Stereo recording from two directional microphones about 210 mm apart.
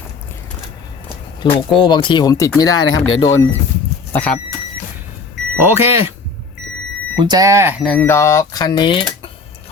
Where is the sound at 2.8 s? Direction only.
70° left (ahead or behind).